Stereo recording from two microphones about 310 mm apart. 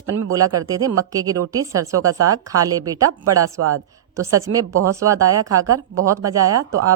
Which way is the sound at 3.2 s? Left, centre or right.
Right.